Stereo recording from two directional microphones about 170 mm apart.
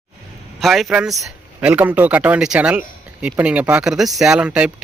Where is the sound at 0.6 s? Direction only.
Centre (ahead or behind).